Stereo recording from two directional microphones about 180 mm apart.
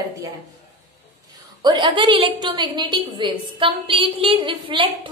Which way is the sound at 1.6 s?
25° right (ahead or behind).